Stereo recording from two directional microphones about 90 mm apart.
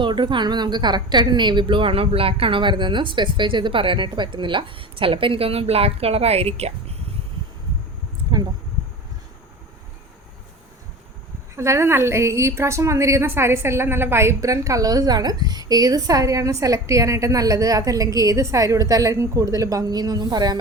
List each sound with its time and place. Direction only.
0.0 s a woman's voice: 60° right (ahead or behind); by 6.2 s 90° right
11.5 s a woman's voice: 30° right (ahead or behind); by 20.6 s 50° right (ahead or behind)